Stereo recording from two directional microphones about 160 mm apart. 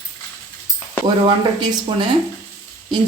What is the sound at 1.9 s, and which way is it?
Speech, 30° right (ahead or behind).